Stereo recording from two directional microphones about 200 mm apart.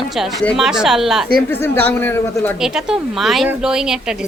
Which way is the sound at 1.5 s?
10° left (ahead or behind).